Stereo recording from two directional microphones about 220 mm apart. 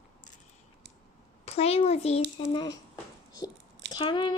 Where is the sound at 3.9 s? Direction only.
20° left (ahead or behind).